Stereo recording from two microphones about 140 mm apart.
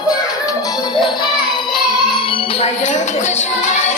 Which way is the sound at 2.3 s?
45° left (ahead or behind).